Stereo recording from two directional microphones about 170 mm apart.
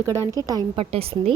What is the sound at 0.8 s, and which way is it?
Speech, 35° right (ahead or behind).